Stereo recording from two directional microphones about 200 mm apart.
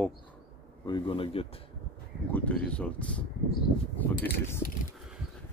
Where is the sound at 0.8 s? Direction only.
25° left (ahead or behind).